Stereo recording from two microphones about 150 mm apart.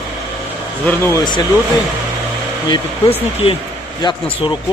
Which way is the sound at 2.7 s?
40° left (ahead or behind).